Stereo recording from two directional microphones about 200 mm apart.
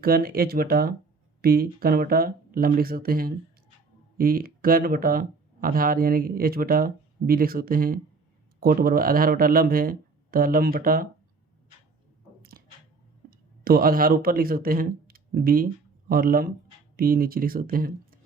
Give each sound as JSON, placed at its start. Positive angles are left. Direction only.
{"t": 0.0, "sound": "speech", "side_deg": -50}
{"t": 12.4, "sound": "a sound", "side_deg": -50}
{"t": 13.7, "sound": "speech", "side_deg": -45}